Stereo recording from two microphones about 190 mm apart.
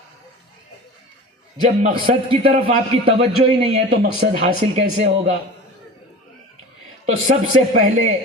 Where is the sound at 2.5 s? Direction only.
35° right (ahead or behind).